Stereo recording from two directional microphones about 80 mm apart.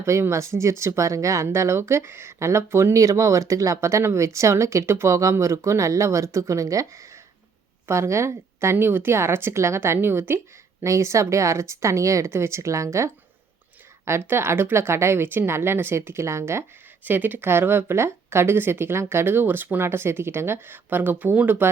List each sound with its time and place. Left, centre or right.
0.0 s speech: right
10.8 s speech: right
17.0 s speech: right